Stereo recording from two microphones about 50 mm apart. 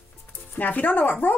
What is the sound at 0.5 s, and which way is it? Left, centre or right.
Speech, left.